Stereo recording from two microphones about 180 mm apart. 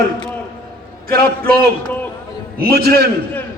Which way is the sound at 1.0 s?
55° right (ahead or behind).